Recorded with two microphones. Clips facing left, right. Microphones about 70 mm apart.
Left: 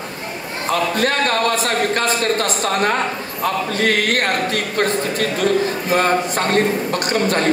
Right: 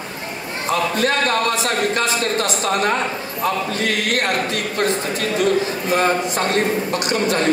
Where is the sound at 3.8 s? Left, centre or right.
Left.